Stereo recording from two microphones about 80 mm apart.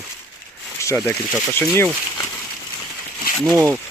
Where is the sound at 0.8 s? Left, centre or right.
Left.